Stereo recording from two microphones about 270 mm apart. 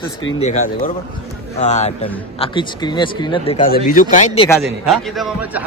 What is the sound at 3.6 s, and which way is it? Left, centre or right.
A man's voice, left.